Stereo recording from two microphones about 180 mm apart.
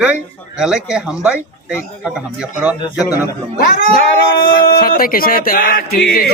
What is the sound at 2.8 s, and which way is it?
Speech, 20° left (ahead or behind).